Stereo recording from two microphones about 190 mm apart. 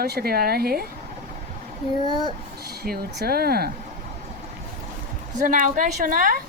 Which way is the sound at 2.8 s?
55° right (ahead or behind).